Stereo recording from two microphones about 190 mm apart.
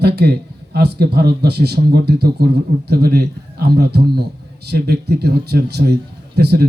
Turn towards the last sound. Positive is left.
turn(degrees=-60)  # may be behind; listen again after turning